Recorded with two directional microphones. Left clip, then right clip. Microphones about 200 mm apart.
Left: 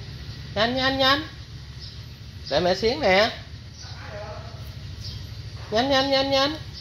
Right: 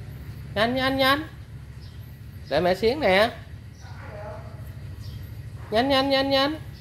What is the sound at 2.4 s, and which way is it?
Speech, 10° right (ahead or behind).